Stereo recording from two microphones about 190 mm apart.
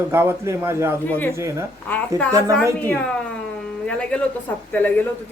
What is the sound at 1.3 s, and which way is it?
A man's voice, 15° right (ahead or behind).